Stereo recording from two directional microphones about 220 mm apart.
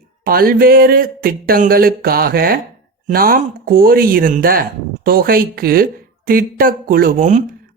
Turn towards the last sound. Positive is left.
turn(degrees=-35)  # may be behind; listen again after turning